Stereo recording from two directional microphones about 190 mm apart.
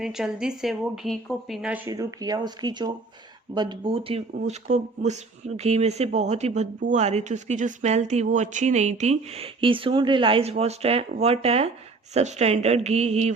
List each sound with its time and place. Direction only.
0.0 s speech: 5° right (ahead or behind)
1.9 s speech: 20° right (ahead or behind); by 13.3 s 35° right (ahead or behind)